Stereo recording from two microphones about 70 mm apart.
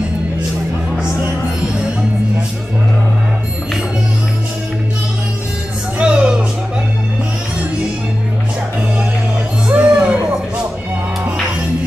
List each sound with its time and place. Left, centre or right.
5.9 s music: centre
9.7 s music: centre